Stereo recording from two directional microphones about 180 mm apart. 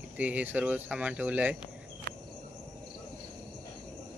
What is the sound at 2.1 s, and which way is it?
Cricket, 55° right (ahead or behind).